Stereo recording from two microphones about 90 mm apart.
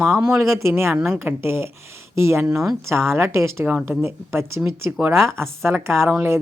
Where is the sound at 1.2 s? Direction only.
25° right (ahead or behind).